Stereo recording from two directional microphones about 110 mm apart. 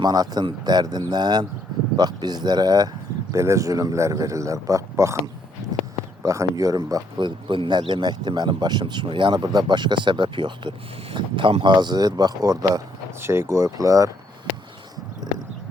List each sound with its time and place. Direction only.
0.0 s speech: 35° right (ahead or behind)
3.3 s speech: 25° right (ahead or behind)
13.2 s speech: 20° right (ahead or behind)